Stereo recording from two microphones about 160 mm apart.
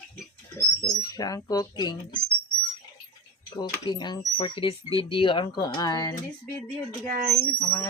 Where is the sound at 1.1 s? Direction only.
25° left (ahead or behind).